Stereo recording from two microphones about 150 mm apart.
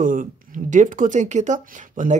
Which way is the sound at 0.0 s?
65° right (ahead or behind).